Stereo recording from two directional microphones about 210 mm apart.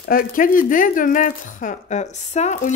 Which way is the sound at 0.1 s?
40° left (ahead or behind).